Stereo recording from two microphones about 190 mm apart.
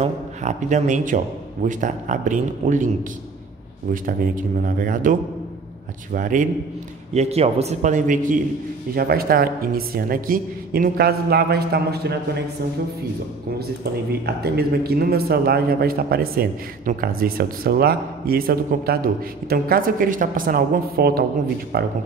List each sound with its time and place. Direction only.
0.0 s a man's voice: 40° right (ahead or behind)
6.1 s a man's voice: 45° right (ahead or behind)
7.2 s a man's voice: 35° right (ahead or behind); by 12.2 s 55° right (ahead or behind)
14.2 s a man's voice: 55° right (ahead or behind)